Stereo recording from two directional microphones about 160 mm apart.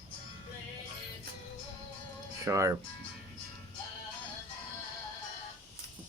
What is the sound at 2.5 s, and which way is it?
Speech, 20° right (ahead or behind).